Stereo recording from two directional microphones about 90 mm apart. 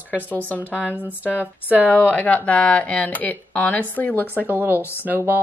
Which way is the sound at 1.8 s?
20° left (ahead or behind).